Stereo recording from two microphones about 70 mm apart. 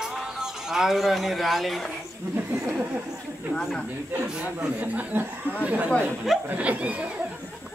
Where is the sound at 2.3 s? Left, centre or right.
Right.